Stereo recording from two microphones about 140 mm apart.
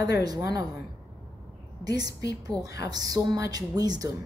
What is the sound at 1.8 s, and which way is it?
A woman's voice, 25° right (ahead or behind).